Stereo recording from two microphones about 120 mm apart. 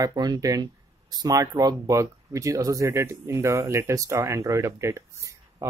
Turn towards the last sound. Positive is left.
turn(degrees=-25)  # may be behind; listen again after turning